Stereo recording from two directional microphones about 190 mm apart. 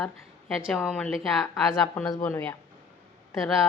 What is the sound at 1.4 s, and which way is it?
Speech, 15° left (ahead or behind).